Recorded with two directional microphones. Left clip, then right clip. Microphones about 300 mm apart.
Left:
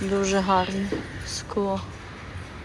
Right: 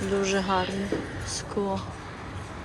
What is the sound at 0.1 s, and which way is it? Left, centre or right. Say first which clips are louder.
A woman's voice: left 4 dB; centre.